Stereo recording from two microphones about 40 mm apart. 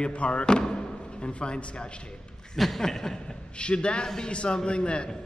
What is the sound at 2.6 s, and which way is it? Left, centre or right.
Speech, centre.